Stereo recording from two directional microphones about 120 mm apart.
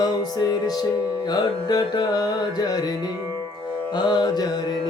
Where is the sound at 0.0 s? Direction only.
35° left (ahead or behind).